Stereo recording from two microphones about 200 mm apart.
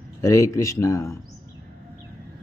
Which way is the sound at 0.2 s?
15° left (ahead or behind).